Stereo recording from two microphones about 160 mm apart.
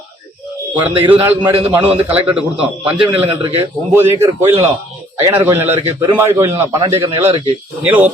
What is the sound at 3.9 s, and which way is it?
A man's voice, 15° right (ahead or behind).